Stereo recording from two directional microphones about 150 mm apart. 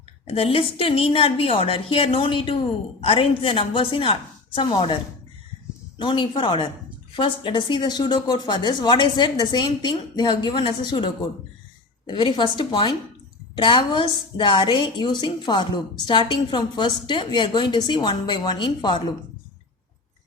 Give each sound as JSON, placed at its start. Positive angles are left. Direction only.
{"t": 0.3, "sound": "a woman's voice", "side_deg": 40}
{"t": 6.0, "sound": "a woman's voice", "side_deg": 35}